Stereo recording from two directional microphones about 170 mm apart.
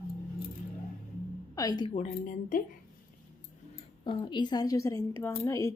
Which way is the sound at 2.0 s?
55° left (ahead or behind).